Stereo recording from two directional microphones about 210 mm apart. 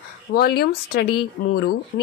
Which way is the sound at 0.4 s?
50° left (ahead or behind).